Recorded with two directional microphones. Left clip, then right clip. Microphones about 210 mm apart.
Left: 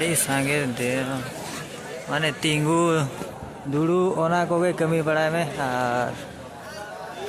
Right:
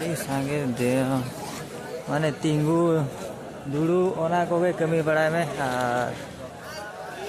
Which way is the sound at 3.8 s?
15° left (ahead or behind).